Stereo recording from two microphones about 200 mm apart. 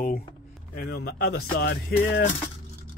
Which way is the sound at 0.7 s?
50° left (ahead or behind).